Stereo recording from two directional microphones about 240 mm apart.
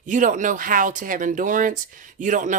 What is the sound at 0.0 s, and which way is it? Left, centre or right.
Speech, right.